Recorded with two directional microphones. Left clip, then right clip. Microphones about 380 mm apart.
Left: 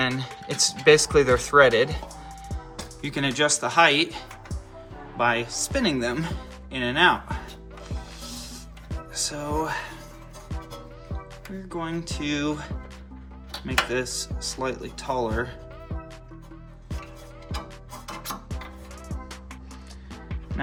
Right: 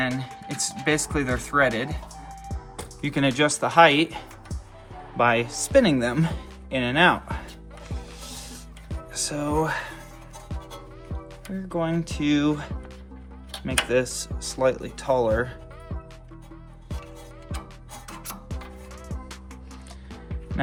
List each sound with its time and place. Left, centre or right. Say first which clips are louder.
0.0 s speech: left 1 dB; centre
3.0 s speech: right 2 dB; centre
7.9 s music: even; right
9.1 s speech: right 2 dB; right
11.8 s speech: right 4 dB; centre
20.1 s music: left 1 dB; centre